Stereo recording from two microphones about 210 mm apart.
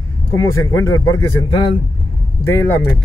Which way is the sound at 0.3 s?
15° left (ahead or behind).